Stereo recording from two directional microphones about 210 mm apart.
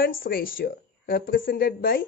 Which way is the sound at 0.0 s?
45° left (ahead or behind).